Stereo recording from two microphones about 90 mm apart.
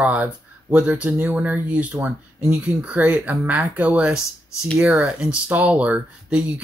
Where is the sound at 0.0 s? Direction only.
15° right (ahead or behind).